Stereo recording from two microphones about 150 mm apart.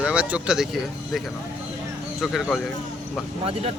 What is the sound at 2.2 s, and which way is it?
Speech, centre (ahead or behind).